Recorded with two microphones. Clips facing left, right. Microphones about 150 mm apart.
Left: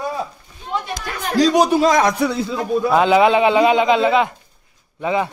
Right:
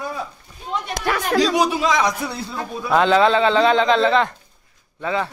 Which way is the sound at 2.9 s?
10° left (ahead or behind).